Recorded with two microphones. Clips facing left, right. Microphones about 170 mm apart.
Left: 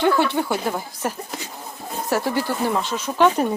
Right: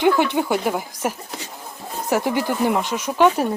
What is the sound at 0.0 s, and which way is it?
Speech, 15° right (ahead or behind).